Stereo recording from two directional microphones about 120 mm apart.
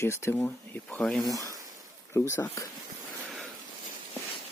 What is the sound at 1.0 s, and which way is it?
Speech, 5° left (ahead or behind).